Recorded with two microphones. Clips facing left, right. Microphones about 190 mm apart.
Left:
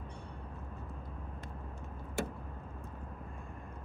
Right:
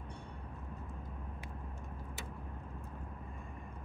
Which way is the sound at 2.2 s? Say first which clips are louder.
Left 15 dB; 60° left (ahead or behind).